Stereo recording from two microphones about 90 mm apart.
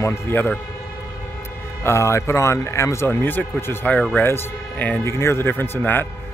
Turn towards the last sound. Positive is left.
turn(degrees=20)  # may be behind; listen again after turning